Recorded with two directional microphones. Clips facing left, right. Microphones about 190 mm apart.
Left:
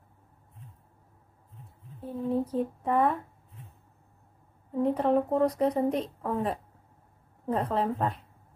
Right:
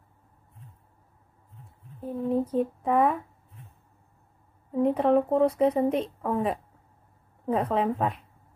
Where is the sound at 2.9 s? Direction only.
5° right (ahead or behind).